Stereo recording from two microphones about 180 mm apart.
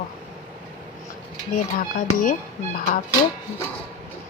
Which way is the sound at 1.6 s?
45° left (ahead or behind).